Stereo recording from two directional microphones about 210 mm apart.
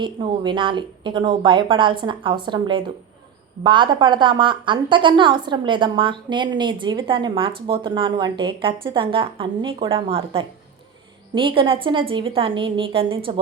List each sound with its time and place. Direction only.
0.0 s a woman's voice: 20° right (ahead or behind)